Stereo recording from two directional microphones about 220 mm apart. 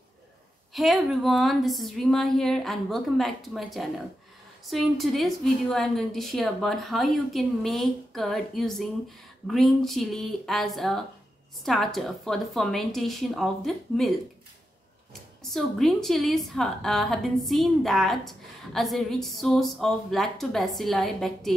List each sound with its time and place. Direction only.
0.7 s a woman's voice: centre (ahead or behind)
15.5 s a woman's voice: centre (ahead or behind)